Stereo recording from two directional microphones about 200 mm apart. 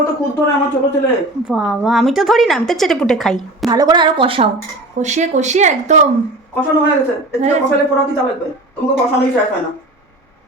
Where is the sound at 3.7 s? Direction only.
20° right (ahead or behind); by 6.0 s 35° right (ahead or behind).